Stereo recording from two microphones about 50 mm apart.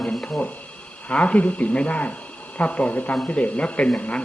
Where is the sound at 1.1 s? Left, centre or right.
Left.